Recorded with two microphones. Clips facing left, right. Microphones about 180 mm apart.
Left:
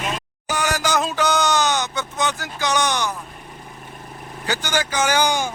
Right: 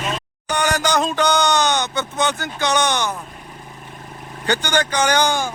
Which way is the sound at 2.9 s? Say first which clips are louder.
Right 2 dB; 20° right (ahead or behind).